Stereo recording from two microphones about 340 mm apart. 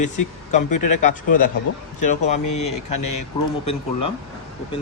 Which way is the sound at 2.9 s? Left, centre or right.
Left.